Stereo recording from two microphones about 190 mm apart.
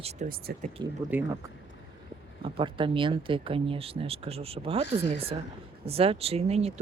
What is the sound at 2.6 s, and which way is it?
Speech, 25° right (ahead or behind).